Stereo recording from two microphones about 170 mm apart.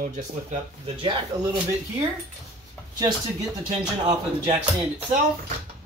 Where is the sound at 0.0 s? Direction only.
45° right (ahead or behind).